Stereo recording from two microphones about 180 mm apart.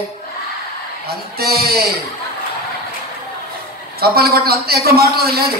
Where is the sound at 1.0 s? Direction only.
60° right (ahead or behind).